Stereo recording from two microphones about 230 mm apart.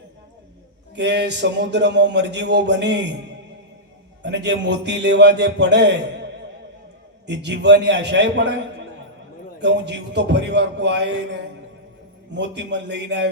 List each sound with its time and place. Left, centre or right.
0.9 s a man's voice: right
4.2 s a man's voice: right
7.3 s a man's voice: right
9.6 s a man's voice: right